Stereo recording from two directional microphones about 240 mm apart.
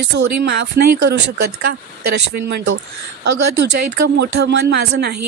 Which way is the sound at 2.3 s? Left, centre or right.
Right.